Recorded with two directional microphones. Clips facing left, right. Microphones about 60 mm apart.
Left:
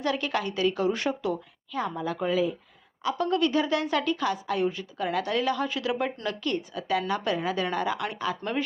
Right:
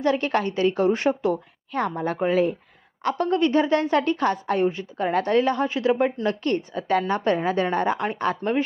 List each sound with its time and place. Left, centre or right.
0.0 s a woman's voice: right
1.7 s a woman's voice: right
2.1 s a woman's voice: right
3.0 s a woman's voice: right
3.2 s a woman's voice: right
8.4 s speech: right